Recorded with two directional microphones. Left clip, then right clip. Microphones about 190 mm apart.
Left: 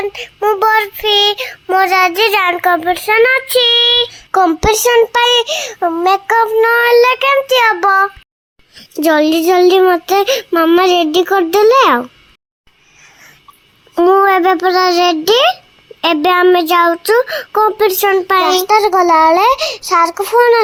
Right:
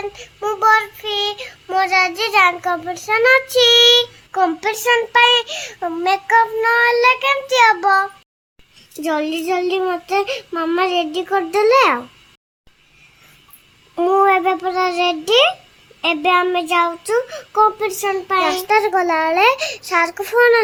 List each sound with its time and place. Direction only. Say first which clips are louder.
0.1 s child singing: left 9 dB; 20° left (ahead or behind)
4.3 s child singing: left 11 dB; 30° left (ahead or behind)
13.9 s child singing: left 5 dB; 20° left (ahead or behind)